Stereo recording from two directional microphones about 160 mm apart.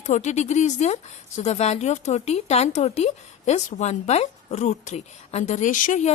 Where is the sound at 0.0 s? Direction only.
45° left (ahead or behind).